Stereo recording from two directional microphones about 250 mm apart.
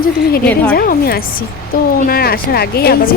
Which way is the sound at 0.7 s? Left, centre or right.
Left.